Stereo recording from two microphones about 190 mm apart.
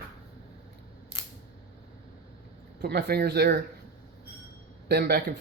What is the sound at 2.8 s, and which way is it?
Speech, 60° right (ahead or behind).